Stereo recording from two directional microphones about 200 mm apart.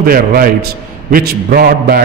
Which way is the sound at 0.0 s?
45° right (ahead or behind).